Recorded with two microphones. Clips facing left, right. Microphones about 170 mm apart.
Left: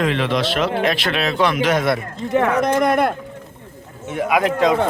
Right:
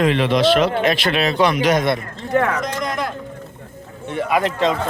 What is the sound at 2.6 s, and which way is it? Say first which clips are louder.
Speech: left 7 dB; 60° left (ahead or behind).